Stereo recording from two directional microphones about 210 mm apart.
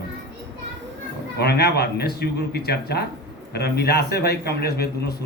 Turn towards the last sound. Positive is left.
turn(degrees=50)  # may be behind; listen again after turning